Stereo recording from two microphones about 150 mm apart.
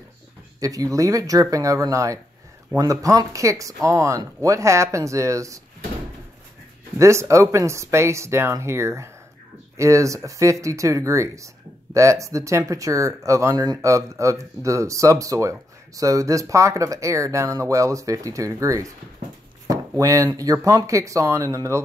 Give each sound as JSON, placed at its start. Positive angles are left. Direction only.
{"t": 0.6, "sound": "speech", "side_deg": -25}
{"t": 7.0, "sound": "speech", "side_deg": -20}